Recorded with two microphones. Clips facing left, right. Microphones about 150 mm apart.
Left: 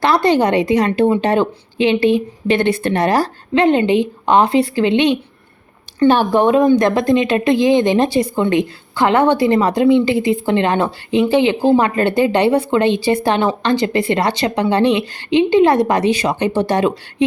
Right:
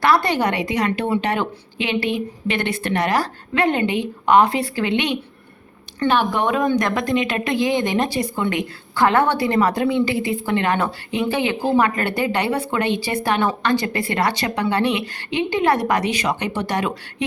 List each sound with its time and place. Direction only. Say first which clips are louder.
0.0 s speech: left 4 dB; 25° left (ahead or behind)
6.1 s speech: left 6 dB; 35° left (ahead or behind)